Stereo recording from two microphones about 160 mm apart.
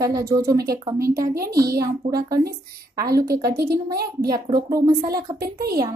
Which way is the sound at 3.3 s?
75° right (ahead or behind).